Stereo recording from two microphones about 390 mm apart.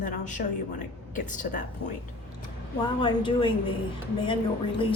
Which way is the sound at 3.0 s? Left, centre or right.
Centre.